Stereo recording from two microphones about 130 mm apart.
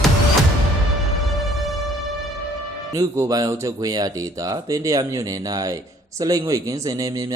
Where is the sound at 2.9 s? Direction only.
25° right (ahead or behind).